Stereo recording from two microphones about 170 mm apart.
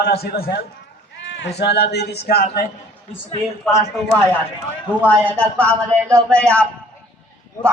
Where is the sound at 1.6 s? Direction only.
80° left.